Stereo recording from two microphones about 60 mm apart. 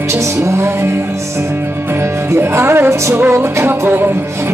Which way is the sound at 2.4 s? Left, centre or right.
Right.